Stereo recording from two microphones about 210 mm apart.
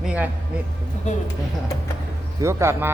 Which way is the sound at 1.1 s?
35° left (ahead or behind).